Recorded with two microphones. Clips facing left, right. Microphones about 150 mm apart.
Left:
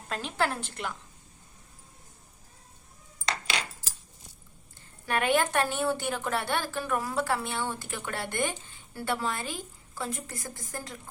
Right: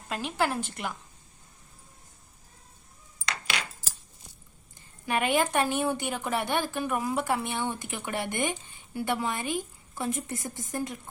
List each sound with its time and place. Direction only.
0.1 s a woman's voice: 10° right (ahead or behind)
5.0 s a woman's voice: 10° right (ahead or behind)